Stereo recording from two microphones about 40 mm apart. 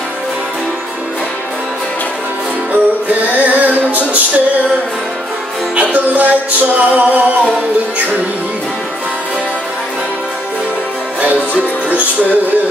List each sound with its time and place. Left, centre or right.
2.7 s music: right
5.8 s music: right